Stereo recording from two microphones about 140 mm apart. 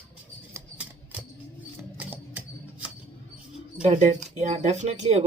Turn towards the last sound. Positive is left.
turn(degrees=-50)  # may be behind; listen again after turning